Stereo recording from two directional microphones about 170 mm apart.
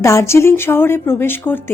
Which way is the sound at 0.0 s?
15° left (ahead or behind).